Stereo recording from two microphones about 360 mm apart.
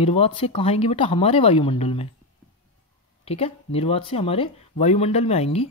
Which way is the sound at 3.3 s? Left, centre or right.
Centre.